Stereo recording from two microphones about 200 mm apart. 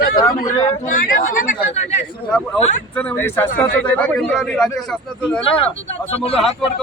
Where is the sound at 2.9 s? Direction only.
10° left (ahead or behind).